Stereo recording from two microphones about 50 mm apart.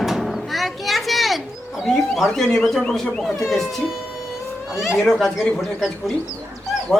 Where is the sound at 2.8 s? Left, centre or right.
Centre.